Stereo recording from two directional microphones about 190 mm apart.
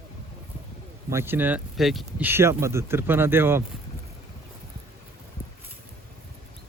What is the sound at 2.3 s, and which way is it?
Speech, 15° right (ahead or behind).